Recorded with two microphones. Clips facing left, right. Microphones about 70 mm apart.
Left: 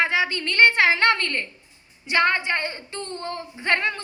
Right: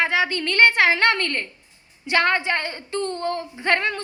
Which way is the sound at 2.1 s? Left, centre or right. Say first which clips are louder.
Right 1 dB; right.